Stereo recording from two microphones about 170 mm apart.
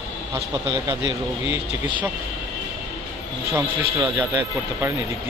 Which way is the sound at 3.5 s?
10° right (ahead or behind).